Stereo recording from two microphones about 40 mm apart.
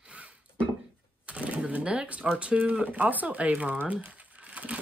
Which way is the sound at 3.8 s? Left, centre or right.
Right.